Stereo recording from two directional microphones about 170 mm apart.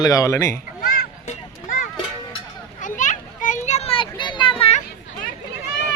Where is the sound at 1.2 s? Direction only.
45° left (ahead or behind).